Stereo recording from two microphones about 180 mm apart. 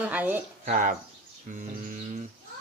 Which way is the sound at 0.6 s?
45° right (ahead or behind).